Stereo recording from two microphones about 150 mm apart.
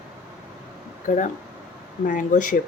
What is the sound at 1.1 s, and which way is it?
Speech, 65° left (ahead or behind).